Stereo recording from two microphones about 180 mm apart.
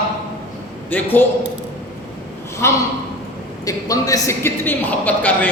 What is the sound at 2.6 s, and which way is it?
A man's voice, 15° left (ahead or behind).